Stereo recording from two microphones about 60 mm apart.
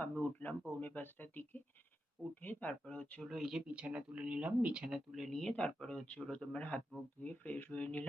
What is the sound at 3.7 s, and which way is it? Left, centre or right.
Speech, centre.